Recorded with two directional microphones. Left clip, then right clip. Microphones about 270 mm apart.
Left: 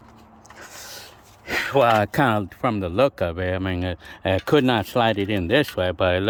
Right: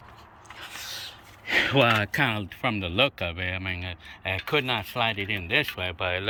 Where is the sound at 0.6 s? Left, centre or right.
Centre.